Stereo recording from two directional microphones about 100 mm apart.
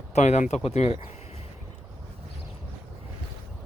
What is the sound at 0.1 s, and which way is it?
Speech, 90° left.